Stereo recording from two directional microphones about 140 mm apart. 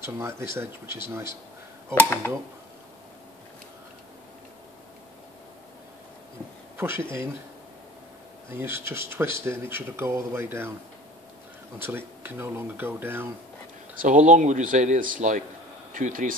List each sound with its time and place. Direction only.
0.0 s speech: 20° right (ahead or behind)
2.0 s speech: 15° left (ahead or behind)
6.8 s speech: 15° right (ahead or behind)
8.5 s speech: 15° right (ahead or behind)
11.8 s speech: 15° right (ahead or behind)
14.0 s speech: 60° right (ahead or behind)